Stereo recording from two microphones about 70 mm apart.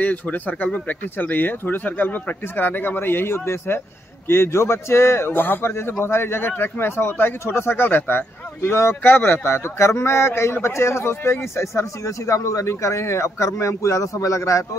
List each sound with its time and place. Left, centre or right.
0.0 s speech: left